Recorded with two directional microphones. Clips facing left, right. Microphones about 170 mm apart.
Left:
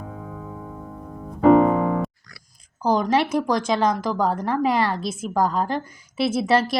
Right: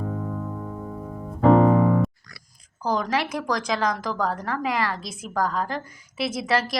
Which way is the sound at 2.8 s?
25° left (ahead or behind).